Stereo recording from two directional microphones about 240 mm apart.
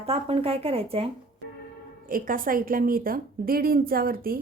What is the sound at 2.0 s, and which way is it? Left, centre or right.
A woman's voice, right.